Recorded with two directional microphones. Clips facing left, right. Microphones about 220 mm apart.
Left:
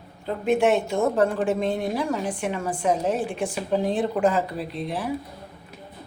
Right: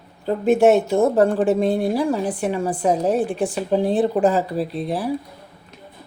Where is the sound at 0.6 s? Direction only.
35° right (ahead or behind).